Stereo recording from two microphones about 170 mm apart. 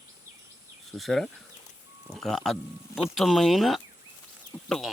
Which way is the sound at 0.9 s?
Centre (ahead or behind).